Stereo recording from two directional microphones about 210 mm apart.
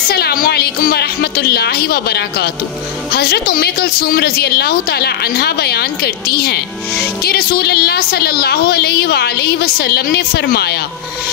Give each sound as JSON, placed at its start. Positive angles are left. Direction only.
{"t": 0.1, "sound": "a woman's voice", "side_deg": 45}